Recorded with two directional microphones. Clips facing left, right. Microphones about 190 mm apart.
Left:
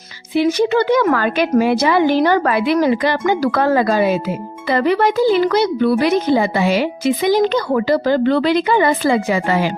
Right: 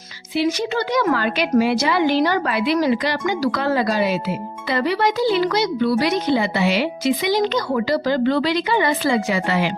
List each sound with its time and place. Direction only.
0.3 s a woman's voice: 60° left (ahead or behind)